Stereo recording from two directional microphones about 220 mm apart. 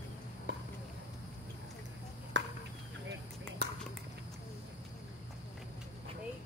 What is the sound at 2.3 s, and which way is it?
Chop, 55° right (ahead or behind).